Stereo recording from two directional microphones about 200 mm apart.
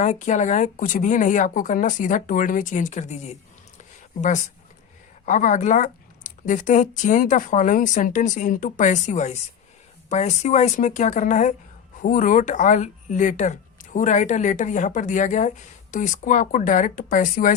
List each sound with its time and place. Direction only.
0.0 s speech: 40° left (ahead or behind)
5.2 s speech: 40° left (ahead or behind)